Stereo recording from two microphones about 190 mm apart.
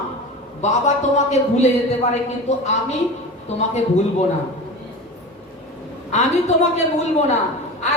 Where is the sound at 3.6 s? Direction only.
35° left (ahead or behind).